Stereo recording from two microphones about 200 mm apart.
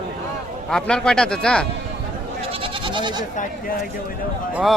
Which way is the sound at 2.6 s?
25° right (ahead or behind).